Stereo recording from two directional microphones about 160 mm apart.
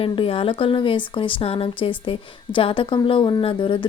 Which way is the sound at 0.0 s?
35° left (ahead or behind).